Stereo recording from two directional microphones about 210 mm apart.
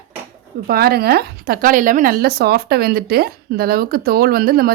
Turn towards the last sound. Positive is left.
turn(degrees=-45)  # may be behind; listen again after turning